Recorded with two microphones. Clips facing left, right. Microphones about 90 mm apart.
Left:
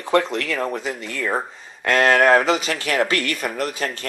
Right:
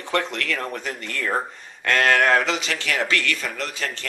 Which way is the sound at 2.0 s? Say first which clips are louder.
Left 4 dB; 30° left (ahead or behind).